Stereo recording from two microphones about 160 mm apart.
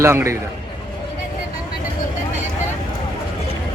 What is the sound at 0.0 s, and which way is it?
Speech, 15° right (ahead or behind).